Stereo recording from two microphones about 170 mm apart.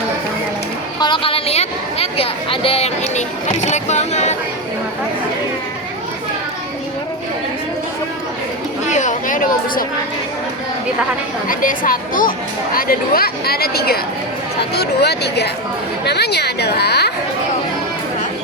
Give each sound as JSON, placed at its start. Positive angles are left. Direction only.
{"t": 0.9, "sound": "a woman's voice", "side_deg": 30}
{"t": 8.9, "sound": "chatter", "side_deg": 45}
{"t": 11.4, "sound": "a woman's voice", "side_deg": 55}